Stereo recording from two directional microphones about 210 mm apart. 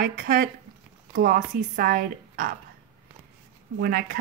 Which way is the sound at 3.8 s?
45° right (ahead or behind).